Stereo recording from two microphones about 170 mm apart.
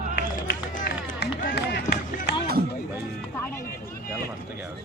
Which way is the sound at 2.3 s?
75° left (ahead or behind).